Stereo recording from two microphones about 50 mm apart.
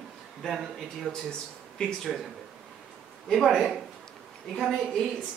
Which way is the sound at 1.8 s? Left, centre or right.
Centre.